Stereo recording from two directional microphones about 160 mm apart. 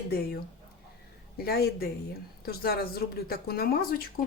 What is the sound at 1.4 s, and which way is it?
A woman's voice, 75° left (ahead or behind).